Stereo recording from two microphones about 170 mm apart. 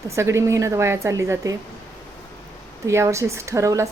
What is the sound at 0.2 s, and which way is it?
A woman's voice, 15° right (ahead or behind).